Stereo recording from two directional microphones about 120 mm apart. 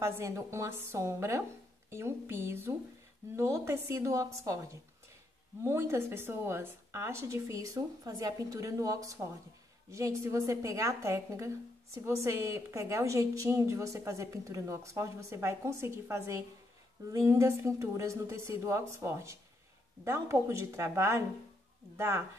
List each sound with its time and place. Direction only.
0.0 s a woman's voice: 25° right (ahead or behind)
5.6 s a woman's voice: 20° right (ahead or behind)